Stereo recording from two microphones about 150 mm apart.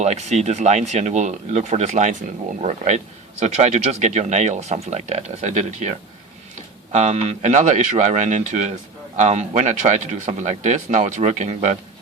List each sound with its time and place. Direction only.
0.0 s speech: 50° right (ahead or behind)
6.9 s speech: 50° right (ahead or behind)